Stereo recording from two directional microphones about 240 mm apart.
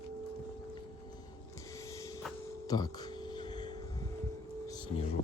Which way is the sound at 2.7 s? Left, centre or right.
Centre.